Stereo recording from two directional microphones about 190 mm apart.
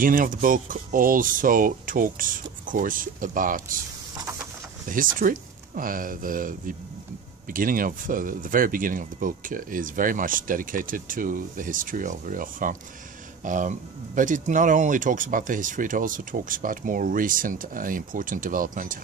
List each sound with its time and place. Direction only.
0.0 s speech: 45° right (ahead or behind)
4.8 s speech: 45° right (ahead or behind)